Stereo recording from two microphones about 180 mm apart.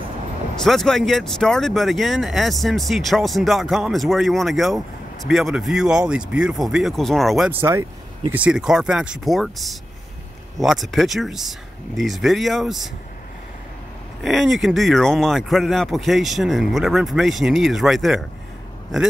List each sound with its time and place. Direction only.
0.6 s speech: centre (ahead or behind)
7.5 s speech: 15° right (ahead or behind)
14.2 s speech: centre (ahead or behind)